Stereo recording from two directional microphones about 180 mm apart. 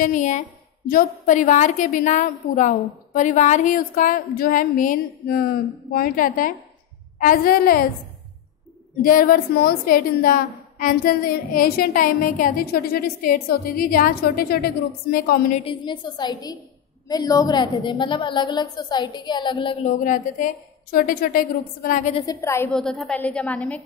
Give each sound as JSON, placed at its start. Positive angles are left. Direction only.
{"t": 0.0, "sound": "a woman's voice", "side_deg": 45}
{"t": 9.0, "sound": "a woman's voice", "side_deg": 50}
{"t": 15.5, "sound": "a woman's voice", "side_deg": 30}
{"t": 20.0, "sound": "a woman's voice", "side_deg": 45}
{"t": 22.2, "sound": "a woman's voice", "side_deg": 15}
{"t": 22.7, "sound": "a woman's voice", "side_deg": 5}